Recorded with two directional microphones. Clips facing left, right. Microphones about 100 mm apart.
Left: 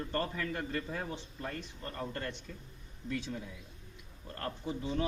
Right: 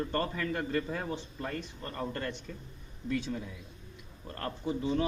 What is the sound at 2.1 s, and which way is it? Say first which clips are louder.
Speech: right 3 dB; 90° right.